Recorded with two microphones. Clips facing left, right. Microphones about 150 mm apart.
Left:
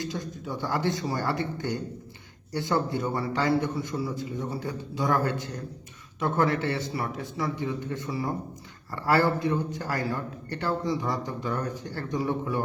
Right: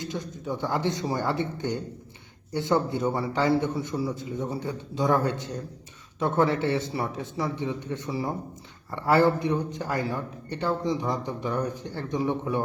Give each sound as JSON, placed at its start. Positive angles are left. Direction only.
{"t": 0.1, "sound": "a man's voice", "side_deg": -20}